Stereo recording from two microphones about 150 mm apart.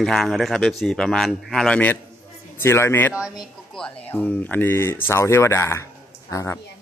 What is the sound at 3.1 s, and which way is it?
Speech, 5° right (ahead or behind).